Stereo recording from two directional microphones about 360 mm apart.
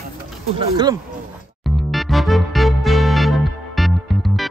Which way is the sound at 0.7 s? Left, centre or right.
Centre.